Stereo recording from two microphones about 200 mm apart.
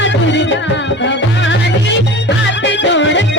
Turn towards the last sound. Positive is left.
turn(degrees=65)  # may be behind; listen again after turning